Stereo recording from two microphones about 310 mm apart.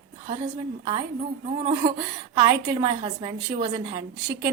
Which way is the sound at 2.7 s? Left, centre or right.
Centre.